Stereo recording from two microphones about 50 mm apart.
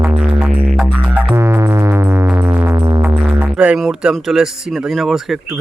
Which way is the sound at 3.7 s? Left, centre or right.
Centre.